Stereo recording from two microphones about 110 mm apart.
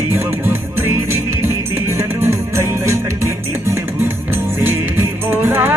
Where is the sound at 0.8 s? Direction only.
20° right (ahead or behind).